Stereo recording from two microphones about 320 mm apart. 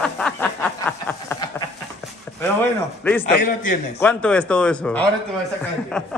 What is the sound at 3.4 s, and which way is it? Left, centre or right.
Speech, left.